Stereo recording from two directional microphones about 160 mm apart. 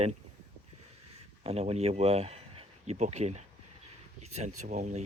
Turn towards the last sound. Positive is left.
turn(degrees=-45)  # may be behind; listen again after turning